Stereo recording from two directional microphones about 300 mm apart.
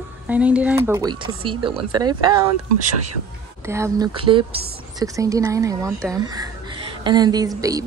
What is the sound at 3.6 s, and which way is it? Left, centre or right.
Speech, centre.